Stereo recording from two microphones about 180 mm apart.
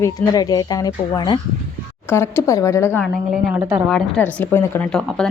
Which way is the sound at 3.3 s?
5° right (ahead or behind).